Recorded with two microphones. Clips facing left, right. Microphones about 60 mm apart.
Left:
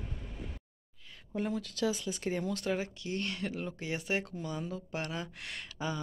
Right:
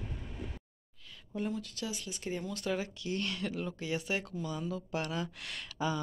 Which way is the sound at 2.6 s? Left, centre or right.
Left.